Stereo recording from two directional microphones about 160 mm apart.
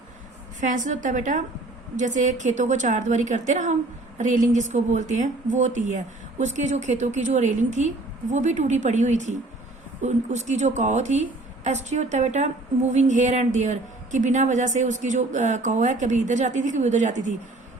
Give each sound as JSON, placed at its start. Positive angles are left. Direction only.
{"t": 0.6, "sound": "a woman's voice", "side_deg": -50}